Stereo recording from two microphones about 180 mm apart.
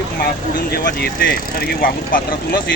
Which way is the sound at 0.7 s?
60° left (ahead or behind).